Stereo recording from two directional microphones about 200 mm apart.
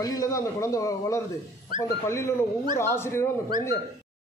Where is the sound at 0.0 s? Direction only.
15° left (ahead or behind).